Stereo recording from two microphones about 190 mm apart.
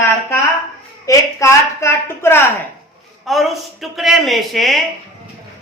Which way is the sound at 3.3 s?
Centre (ahead or behind).